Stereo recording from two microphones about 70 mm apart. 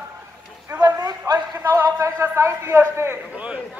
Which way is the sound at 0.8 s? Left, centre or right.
Right.